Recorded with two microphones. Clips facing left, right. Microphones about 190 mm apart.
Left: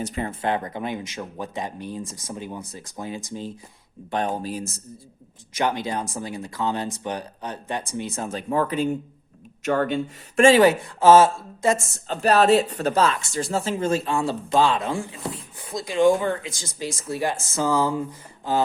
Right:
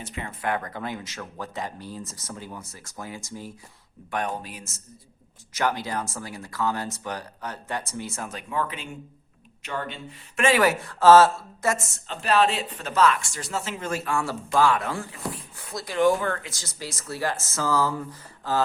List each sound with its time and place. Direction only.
0.0 s speech: 40° left (ahead or behind)
0.3 s speech: 25° left (ahead or behind)
4.4 s speech: 35° left (ahead or behind)
5.5 s speech: 20° left (ahead or behind)
8.3 s speech: 35° left (ahead or behind)
9.6 s speech: 50° left (ahead or behind)
10.3 s speech: 30° left (ahead or behind)
12.0 s speech: 40° left (ahead or behind); by 18.6 s 20° left (ahead or behind)